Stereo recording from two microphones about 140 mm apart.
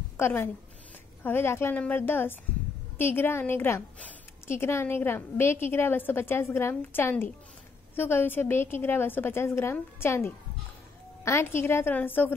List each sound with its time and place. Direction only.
0.2 s a woman's voice: 15° left (ahead or behind)